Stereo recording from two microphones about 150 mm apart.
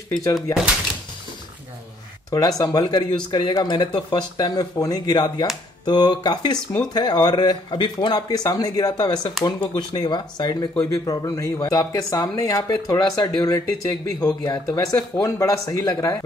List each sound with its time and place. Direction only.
0.1 s speech: 25° left (ahead or behind)
2.3 s speech: 25° left (ahead or behind)